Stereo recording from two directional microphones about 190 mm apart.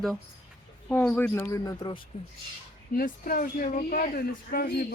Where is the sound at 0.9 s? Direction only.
5° left (ahead or behind); by 2.0 s 25° left (ahead or behind).